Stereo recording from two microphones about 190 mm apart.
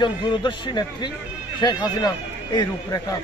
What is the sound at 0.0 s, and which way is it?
Speech, 25° left (ahead or behind).